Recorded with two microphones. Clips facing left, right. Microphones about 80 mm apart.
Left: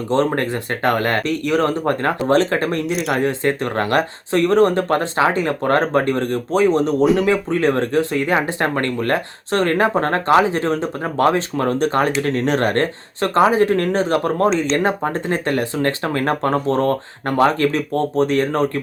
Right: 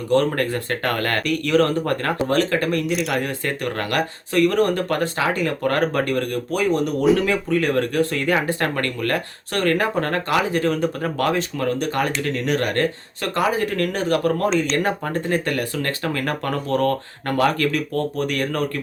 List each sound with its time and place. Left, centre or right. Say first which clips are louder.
0.1 s speech: left 1 dB; left
2.8 s speech: left 2 dB; centre
3.2 s speech: left 6 dB; left